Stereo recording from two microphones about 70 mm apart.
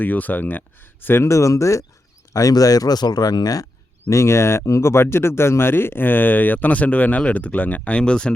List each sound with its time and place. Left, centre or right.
0.0 s speech: left
1.0 s speech: left
4.1 s speech: left; by 8.3 s centre